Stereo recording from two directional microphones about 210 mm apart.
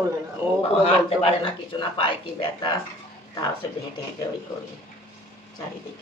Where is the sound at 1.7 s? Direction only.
25° left (ahead or behind).